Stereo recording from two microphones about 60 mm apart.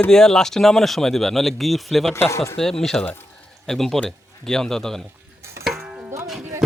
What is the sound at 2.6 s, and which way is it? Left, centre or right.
Stir, centre.